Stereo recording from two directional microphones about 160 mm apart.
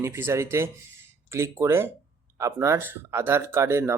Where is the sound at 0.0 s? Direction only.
15° right (ahead or behind).